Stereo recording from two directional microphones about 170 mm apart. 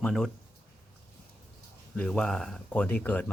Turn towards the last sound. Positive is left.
turn(degrees=10)  # may be behind; listen again after turning